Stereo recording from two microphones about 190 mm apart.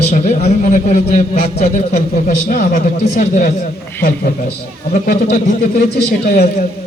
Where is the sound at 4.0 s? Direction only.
50° left (ahead or behind).